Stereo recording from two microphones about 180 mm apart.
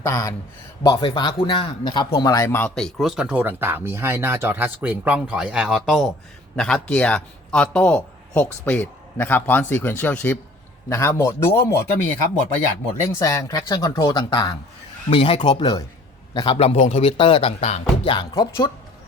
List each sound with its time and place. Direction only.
0.0 s a man's voice: 20° left (ahead or behind)
13.0 s speech: 15° left (ahead or behind)